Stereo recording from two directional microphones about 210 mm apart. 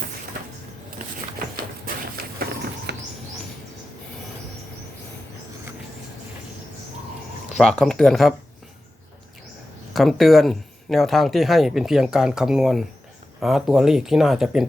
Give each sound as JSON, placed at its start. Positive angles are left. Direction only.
{"t": 1.8, "sound": "a sound", "side_deg": -45}
{"t": 7.5, "sound": "speech", "side_deg": 0}
{"t": 9.9, "sound": "speech", "side_deg": 0}